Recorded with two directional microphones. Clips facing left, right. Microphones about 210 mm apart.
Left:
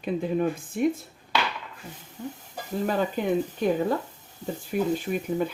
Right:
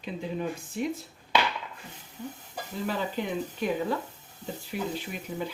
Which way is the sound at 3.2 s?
50° left (ahead or behind).